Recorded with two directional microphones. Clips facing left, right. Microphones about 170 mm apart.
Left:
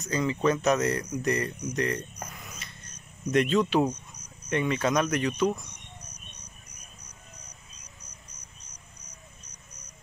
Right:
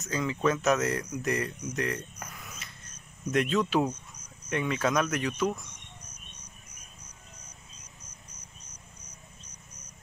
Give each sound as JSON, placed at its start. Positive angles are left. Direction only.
{"t": 0.0, "sound": "speech", "side_deg": 0}
{"t": 3.3, "sound": "speech", "side_deg": 0}